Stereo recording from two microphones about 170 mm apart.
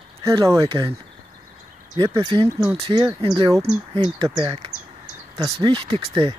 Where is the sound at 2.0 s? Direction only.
25° right (ahead or behind).